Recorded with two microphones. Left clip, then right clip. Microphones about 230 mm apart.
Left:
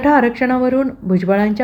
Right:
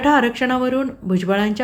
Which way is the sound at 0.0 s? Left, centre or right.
Centre.